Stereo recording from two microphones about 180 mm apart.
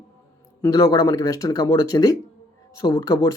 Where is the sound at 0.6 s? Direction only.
20° left (ahead or behind).